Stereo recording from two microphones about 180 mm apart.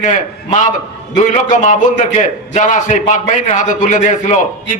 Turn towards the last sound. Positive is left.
turn(degrees=45)  # may be behind; listen again after turning